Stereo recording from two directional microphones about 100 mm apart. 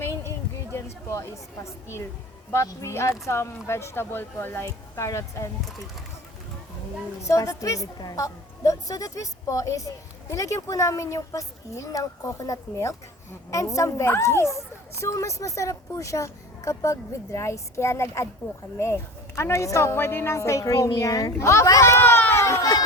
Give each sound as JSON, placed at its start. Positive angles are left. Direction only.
{"t": 0.0, "sound": "a sound", "side_deg": 25}
{"t": 1.1, "sound": "speech", "side_deg": 30}
{"t": 2.5, "sound": "a woman's voice", "side_deg": 25}
{"t": 7.2, "sound": "a woman's voice", "side_deg": 30}